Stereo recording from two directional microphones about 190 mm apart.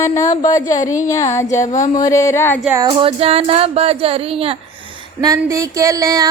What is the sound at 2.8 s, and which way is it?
Mantra, 30° right (ahead or behind).